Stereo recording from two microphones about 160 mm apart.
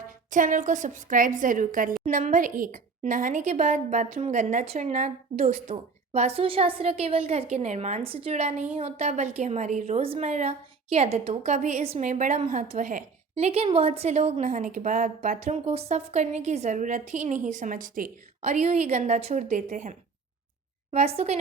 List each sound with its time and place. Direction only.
0.3 s a woman's voice: 55° right (ahead or behind)
13.3 s a woman's voice: 40° right (ahead or behind)
20.9 s speech: 40° right (ahead or behind)